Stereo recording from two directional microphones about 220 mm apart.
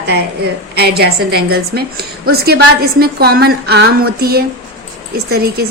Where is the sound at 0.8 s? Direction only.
45° right (ahead or behind).